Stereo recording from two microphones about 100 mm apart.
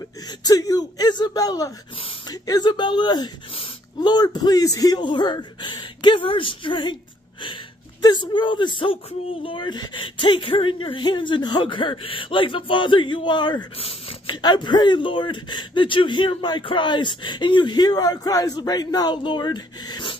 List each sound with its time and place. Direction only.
0.4 s speech: 40° left (ahead or behind); by 7.0 s 55° left (ahead or behind)
8.0 s speech: 45° left (ahead or behind)
13.7 s speech: 65° left (ahead or behind)